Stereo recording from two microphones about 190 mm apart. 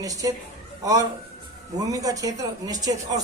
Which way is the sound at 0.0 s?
20° right (ahead or behind).